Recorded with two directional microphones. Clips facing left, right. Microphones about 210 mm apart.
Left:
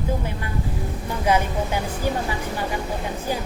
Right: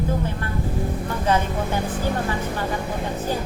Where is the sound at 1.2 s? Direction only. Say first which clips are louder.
Left 1 dB; 10° left (ahead or behind).